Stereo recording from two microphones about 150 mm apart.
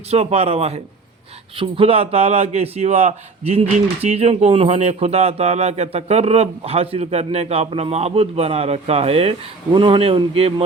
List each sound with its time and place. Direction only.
0.1 s a man's voice: 45° right (ahead or behind)